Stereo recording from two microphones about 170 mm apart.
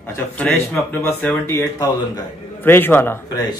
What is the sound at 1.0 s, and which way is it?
Speech, 15° left (ahead or behind).